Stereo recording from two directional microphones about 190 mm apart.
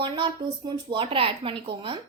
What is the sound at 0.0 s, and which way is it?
A woman's voice, 25° right (ahead or behind).